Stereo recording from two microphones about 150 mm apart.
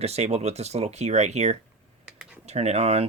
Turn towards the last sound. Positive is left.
turn(degrees=-45)  # may be behind; listen again after turning